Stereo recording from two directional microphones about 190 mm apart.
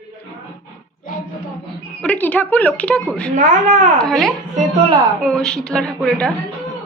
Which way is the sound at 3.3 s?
40° right (ahead or behind).